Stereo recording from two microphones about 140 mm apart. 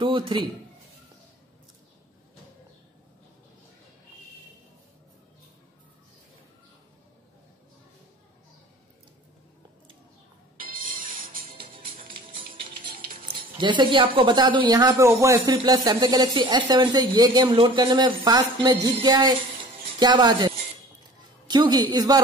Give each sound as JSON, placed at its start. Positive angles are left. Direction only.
{"t": 0.0, "sound": "speech", "side_deg": -35}
{"t": 10.6, "sound": "music", "side_deg": -85}
{"t": 11.6, "sound": "music", "side_deg": -40}
{"t": 13.3, "sound": "a woman's voice", "side_deg": -35}